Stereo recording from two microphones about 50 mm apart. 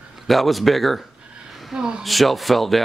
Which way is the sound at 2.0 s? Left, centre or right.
Centre.